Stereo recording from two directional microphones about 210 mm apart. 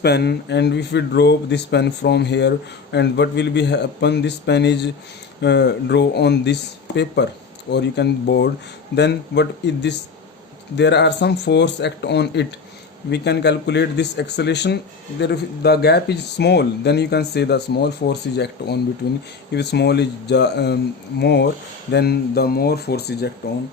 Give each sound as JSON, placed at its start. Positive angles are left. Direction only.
{"t": 0.0, "sound": "speech", "side_deg": 50}